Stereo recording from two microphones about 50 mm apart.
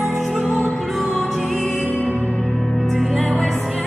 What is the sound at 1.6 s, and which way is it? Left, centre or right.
Music, left.